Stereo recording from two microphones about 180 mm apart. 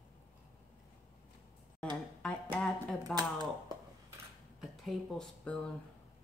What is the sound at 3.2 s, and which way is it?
Speech, 20° right (ahead or behind).